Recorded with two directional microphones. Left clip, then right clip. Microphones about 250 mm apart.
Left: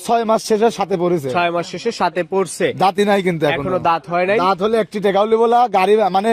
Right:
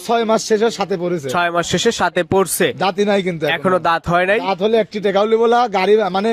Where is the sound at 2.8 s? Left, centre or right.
Left.